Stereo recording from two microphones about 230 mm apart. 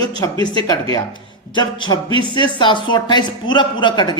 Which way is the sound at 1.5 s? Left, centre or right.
Centre.